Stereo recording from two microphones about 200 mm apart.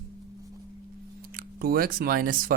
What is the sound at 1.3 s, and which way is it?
Speech, 50° right (ahead or behind).